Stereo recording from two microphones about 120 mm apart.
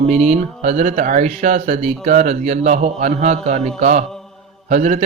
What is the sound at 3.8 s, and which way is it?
Speech, 90° right.